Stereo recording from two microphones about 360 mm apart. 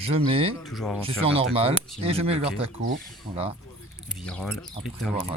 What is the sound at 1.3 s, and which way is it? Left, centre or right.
Speech, centre.